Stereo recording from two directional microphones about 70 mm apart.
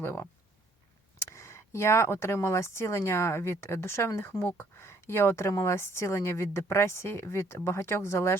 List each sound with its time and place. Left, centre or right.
0.0 s a woman's voice: left